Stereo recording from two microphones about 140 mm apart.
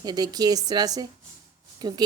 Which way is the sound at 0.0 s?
30° right (ahead or behind).